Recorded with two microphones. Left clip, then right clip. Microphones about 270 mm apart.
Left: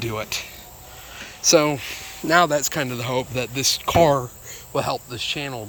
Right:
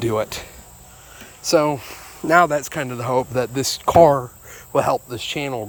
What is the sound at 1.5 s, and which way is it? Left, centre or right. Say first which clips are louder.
Speech: even; centre.